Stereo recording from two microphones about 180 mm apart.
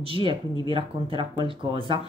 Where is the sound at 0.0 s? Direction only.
30° right (ahead or behind).